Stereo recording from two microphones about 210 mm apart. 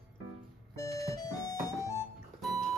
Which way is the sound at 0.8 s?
15° left (ahead or behind).